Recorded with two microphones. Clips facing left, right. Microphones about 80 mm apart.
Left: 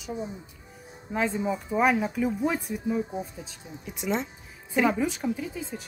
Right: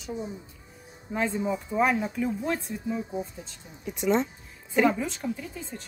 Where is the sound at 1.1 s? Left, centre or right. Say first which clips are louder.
Left 1 dB; centre.